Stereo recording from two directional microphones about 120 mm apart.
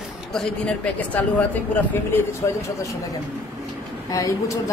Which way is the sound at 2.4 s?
25° left (ahead or behind).